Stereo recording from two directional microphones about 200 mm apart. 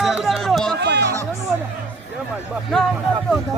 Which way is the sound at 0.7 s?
55° right (ahead or behind).